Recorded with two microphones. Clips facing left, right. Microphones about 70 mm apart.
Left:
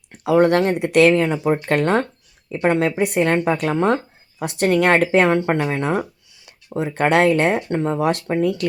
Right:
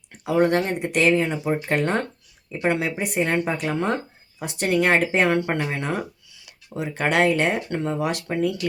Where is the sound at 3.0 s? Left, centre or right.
Left.